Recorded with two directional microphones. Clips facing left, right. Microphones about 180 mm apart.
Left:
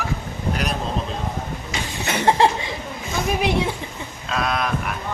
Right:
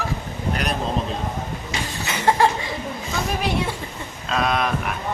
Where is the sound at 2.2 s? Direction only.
25° left (ahead or behind).